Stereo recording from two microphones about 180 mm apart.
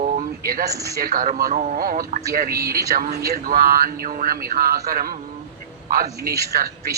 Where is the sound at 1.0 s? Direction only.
50° right (ahead or behind).